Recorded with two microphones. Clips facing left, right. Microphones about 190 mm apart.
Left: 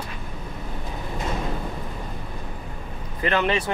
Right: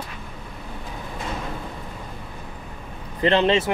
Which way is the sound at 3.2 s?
25° right (ahead or behind).